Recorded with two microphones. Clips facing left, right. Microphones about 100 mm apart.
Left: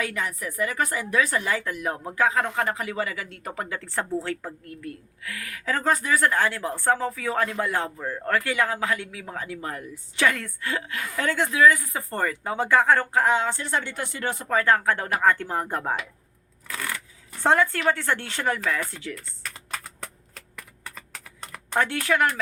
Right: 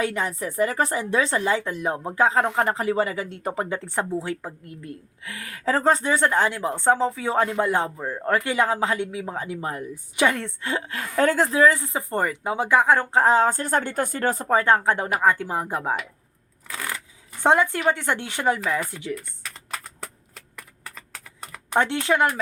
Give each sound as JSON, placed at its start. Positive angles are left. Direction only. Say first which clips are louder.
{"t": 0.0, "sound": "speech", "louder": "right 4 dB", "side_deg": -30}
{"t": 13.1, "sound": "speech", "louder": "right 4 dB", "side_deg": -35}
{"t": 17.4, "sound": "speech", "louder": "right 2 dB", "side_deg": -15}
{"t": 19.4, "sound": "typing", "louder": "even", "side_deg": 0}
{"t": 21.8, "sound": "speech", "louder": "right 2 dB", "side_deg": -25}